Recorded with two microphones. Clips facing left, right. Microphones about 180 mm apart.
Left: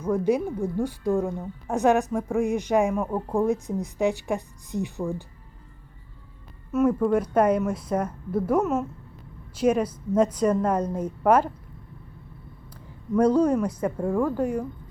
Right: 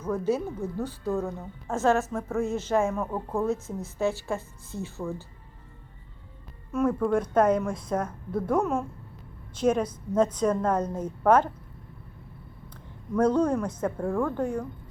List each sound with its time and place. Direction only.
0.0 s a woman's voice: 15° left (ahead or behind)
6.7 s a woman's voice: 5° left (ahead or behind)
12.7 s a woman's voice: 10° left (ahead or behind)